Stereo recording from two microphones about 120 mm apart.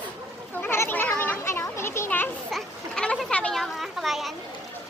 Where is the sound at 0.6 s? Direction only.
20° left (ahead or behind).